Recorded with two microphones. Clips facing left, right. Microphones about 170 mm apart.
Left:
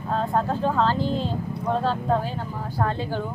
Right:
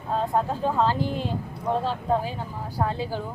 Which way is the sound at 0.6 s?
10° right (ahead or behind).